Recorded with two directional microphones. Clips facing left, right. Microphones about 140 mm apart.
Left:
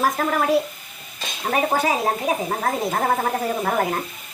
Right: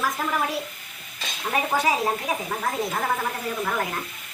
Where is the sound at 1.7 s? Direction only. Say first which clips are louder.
Even; 55° left (ahead or behind).